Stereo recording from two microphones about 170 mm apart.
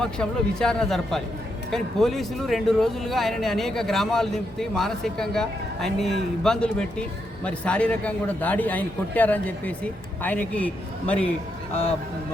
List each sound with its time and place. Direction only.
0.0 s a man's voice: 5° left (ahead or behind)
11.7 s speech: 35° left (ahead or behind)